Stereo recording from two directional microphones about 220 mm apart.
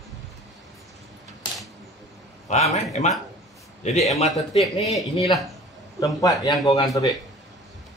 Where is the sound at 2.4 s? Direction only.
30° left (ahead or behind).